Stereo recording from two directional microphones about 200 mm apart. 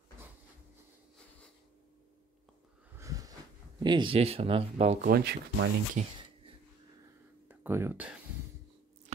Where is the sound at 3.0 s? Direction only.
15° right (ahead or behind).